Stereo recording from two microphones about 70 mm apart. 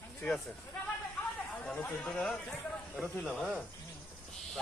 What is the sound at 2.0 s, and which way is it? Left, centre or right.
Speech, centre.